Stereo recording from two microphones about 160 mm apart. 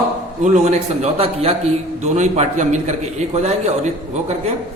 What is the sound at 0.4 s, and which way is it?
A man's voice, 45° right (ahead or behind).